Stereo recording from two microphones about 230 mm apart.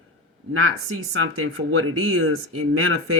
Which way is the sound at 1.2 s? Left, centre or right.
Right.